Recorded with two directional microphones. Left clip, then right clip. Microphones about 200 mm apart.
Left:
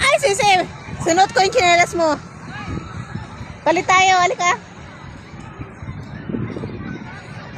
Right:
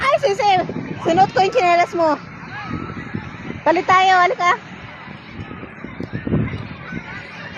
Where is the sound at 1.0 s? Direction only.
10° right (ahead or behind).